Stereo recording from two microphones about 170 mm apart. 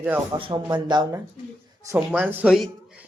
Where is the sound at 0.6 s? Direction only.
25° right (ahead or behind).